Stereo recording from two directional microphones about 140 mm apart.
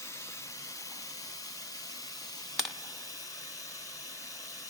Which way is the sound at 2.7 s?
25° left (ahead or behind).